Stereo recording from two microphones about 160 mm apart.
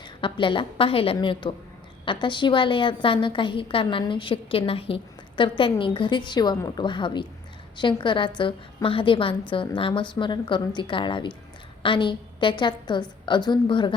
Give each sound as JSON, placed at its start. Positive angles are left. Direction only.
{"t": 0.0, "sound": "a woman's voice", "side_deg": 30}